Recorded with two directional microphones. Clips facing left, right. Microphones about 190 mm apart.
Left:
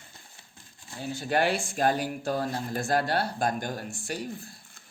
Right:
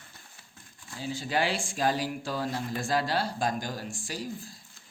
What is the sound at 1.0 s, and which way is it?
Speech, 60° left (ahead or behind).